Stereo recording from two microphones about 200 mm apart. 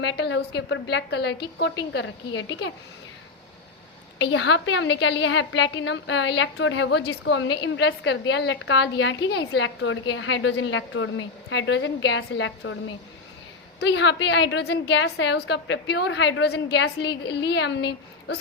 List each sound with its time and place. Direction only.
0.0 s a woman's voice: 60° left (ahead or behind)
4.2 s a woman's voice: 65° left (ahead or behind)
13.7 s a woman's voice: 60° left (ahead or behind)